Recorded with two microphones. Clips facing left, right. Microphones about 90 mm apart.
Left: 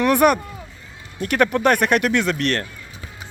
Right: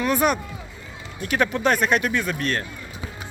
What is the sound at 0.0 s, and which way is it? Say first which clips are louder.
Speech: left 5 dB; 60° left (ahead or behind).